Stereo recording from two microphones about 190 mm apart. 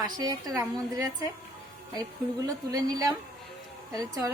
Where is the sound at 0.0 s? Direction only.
20° right (ahead or behind).